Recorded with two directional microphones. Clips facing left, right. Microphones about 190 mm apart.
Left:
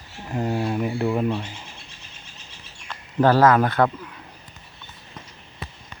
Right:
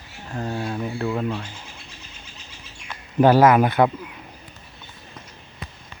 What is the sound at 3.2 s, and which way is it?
Speech, 15° right (ahead or behind).